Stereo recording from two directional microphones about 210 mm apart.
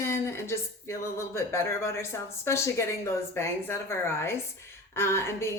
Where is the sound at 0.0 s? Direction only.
15° left (ahead or behind).